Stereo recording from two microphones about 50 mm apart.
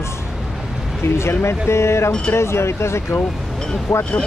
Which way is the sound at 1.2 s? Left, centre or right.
Left.